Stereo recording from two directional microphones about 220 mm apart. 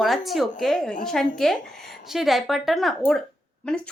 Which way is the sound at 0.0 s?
Centre (ahead or behind).